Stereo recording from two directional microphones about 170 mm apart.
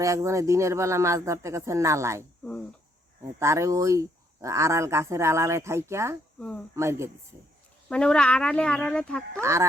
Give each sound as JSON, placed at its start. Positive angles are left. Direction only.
{"t": 0.0, "sound": "speech", "side_deg": -20}
{"t": 3.2, "sound": "speech", "side_deg": -15}
{"t": 7.9, "sound": "speech", "side_deg": 5}
{"t": 9.3, "sound": "speech", "side_deg": -15}